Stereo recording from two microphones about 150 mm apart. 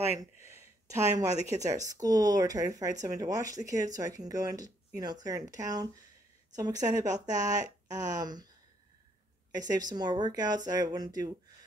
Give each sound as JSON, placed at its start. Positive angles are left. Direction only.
{"t": 0.2, "sound": "speech", "side_deg": -20}
{"t": 9.5, "sound": "speech", "side_deg": -25}